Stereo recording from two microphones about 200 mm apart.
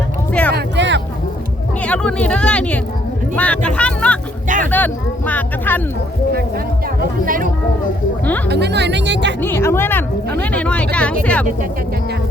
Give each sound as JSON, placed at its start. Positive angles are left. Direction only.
{"t": 0.5, "sound": "a sound", "side_deg": -60}
{"t": 1.8, "sound": "speech", "side_deg": 5}
{"t": 4.4, "sound": "speech", "side_deg": -40}
{"t": 4.7, "sound": "speech", "side_deg": 10}
{"t": 7.3, "sound": "speech", "side_deg": -45}
{"t": 8.4, "sound": "speech", "side_deg": -55}
{"t": 9.4, "sound": "speech", "side_deg": 10}